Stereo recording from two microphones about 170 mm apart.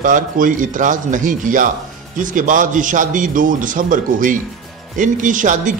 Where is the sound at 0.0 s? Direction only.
50° right (ahead or behind).